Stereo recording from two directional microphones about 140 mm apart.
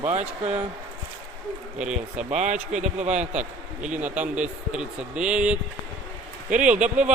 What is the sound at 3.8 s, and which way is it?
A man's voice, 10° right (ahead or behind).